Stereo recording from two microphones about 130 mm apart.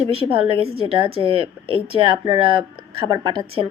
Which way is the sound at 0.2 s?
45° right (ahead or behind).